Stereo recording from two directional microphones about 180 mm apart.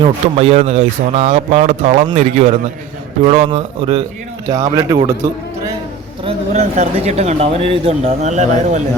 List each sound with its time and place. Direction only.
0.0 s speech: 35° right (ahead or behind)
4.5 s a man's voice: 20° right (ahead or behind)
6.2 s speech: 35° right (ahead or behind)